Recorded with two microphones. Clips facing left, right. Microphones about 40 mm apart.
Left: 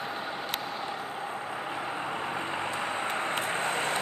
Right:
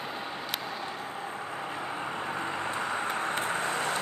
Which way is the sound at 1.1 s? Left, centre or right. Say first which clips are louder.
Left 1 dB; left.